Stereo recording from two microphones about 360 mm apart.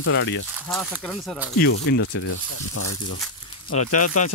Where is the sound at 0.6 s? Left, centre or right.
Centre.